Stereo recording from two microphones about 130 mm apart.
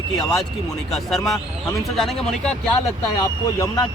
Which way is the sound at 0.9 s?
Centre (ahead or behind).